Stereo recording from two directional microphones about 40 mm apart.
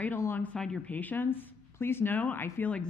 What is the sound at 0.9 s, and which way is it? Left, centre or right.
Speech, left.